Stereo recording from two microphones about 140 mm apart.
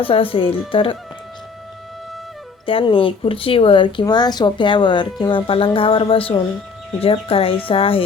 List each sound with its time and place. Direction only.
0.0 s speech: 40° left (ahead or behind)
2.6 s speech: 40° left (ahead or behind)